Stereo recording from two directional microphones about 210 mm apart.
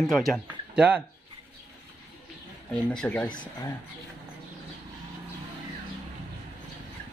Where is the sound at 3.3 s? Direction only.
20° left (ahead or behind).